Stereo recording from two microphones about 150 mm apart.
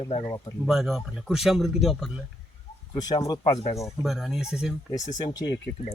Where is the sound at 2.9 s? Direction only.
25° left (ahead or behind).